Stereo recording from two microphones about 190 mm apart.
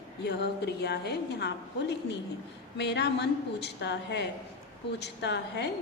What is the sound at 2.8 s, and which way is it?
A woman's voice, 60° left (ahead or behind).